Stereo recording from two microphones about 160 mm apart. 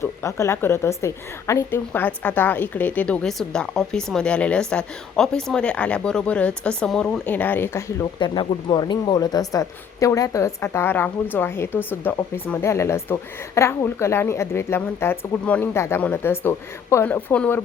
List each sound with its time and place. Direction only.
0.0 s speech: 15° left (ahead or behind)
8.2 s speech: 30° left (ahead or behind); by 17.6 s 10° left (ahead or behind)